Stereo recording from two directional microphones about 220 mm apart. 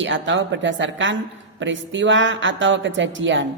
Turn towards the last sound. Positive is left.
turn(degrees=-60)  # may be behind; listen again after turning